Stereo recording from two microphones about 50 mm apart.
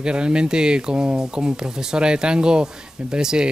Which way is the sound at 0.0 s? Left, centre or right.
Centre.